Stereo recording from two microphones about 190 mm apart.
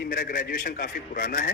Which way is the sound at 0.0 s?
50° left (ahead or behind).